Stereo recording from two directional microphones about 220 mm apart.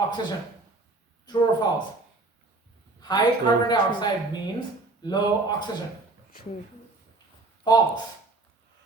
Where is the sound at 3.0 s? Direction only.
20° left (ahead or behind).